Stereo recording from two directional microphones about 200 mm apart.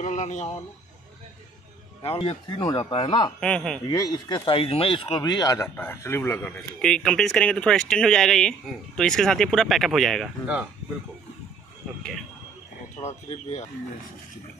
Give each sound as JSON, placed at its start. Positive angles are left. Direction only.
{"t": 0.0, "sound": "a sound", "side_deg": 35}
{"t": 2.0, "sound": "speech", "side_deg": 25}
{"t": 3.3, "sound": "speech", "side_deg": 5}
{"t": 3.8, "sound": "speech", "side_deg": 20}
{"t": 13.3, "sound": "speech", "side_deg": 35}